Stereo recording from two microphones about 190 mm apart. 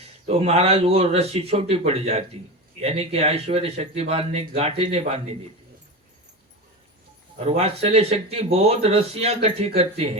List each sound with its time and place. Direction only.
0.3 s speech: 30° right (ahead or behind)
7.3 s speech: 35° right (ahead or behind)